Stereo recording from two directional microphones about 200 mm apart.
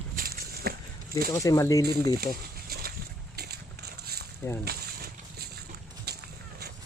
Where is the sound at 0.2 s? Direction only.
50° right (ahead or behind).